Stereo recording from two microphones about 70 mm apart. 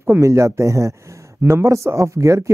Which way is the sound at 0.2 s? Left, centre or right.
Right.